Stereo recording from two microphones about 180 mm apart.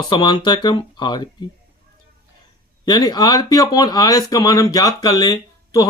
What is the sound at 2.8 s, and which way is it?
Speech, 25° left (ahead or behind).